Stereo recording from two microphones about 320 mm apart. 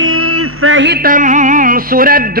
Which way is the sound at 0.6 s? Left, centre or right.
Right.